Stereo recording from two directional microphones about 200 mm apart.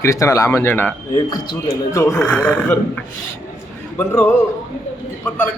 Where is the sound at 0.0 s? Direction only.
15° left (ahead or behind).